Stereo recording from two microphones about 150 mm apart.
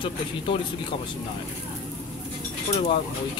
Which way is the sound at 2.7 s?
45° left (ahead or behind).